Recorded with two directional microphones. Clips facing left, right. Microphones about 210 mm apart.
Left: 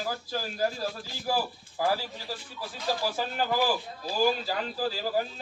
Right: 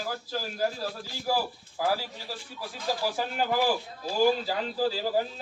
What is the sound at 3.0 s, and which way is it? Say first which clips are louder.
Speech: right 3 dB; 15° right (ahead or behind).